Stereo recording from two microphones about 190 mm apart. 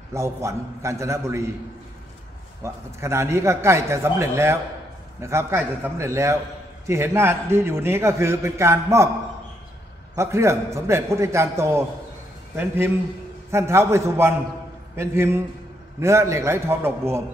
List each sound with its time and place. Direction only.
0.1 s a man's voice: 15° right (ahead or behind)
2.6 s a man's voice: 15° right (ahead or behind)
10.1 s a man's voice: 15° right (ahead or behind)